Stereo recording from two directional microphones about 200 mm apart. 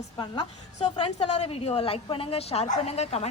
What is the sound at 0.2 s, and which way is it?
A woman's voice, 25° left (ahead or behind).